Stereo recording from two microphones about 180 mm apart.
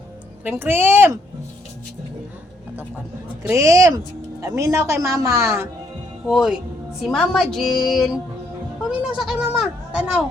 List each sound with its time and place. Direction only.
0.4 s a woman's voice: 10° right (ahead or behind)
3.4 s a woman's voice: 15° right (ahead or behind)
6.2 s speech: centre (ahead or behind)